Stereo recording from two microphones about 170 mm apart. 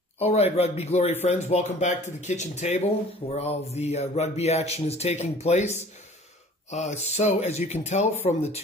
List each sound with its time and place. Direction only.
0.2 s speech: 35° left (ahead or behind)